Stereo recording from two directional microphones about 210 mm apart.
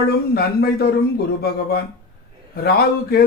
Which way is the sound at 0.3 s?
50° left (ahead or behind).